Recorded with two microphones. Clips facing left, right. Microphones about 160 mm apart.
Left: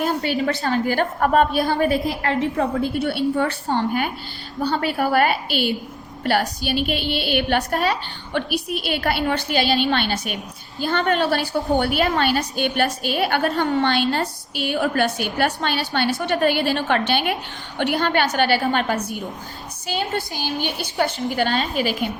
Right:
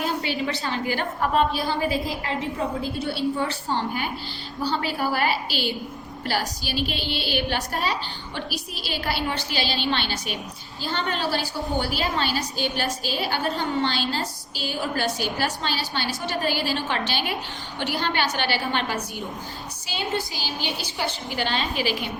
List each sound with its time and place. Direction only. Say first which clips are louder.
0.0 s a woman's voice: left 5 dB; 45° left (ahead or behind)
3.7 s a woman's voice: left 5 dB; 50° left (ahead or behind)